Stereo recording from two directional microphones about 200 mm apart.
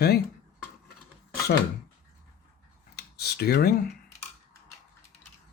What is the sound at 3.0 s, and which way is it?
Computer keyboard, 55° left (ahead or behind).